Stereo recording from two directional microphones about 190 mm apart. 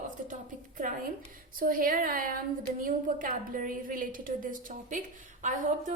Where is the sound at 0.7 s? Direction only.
45° right (ahead or behind).